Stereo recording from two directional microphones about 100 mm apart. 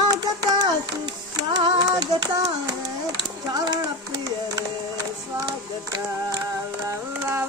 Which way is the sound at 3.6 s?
45° right (ahead or behind).